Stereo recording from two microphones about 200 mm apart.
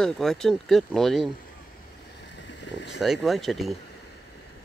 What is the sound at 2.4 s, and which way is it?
Boat, 65° left (ahead or behind).